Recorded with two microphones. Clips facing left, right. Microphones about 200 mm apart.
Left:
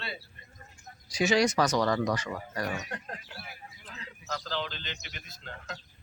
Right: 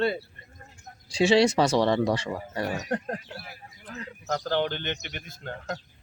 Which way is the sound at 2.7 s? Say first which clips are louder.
Right 9 dB; 45° right (ahead or behind).